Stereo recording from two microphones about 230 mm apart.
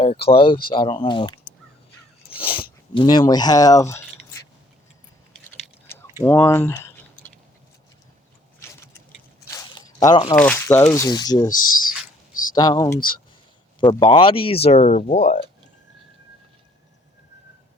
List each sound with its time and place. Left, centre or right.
0.0 s speech: left
5.5 s a sound: centre
6.2 s speech: centre
8.7 s vehicle: centre
9.5 s squish: centre
10.3 s speech: centre
12.5 s speech: centre
14.0 s speech: left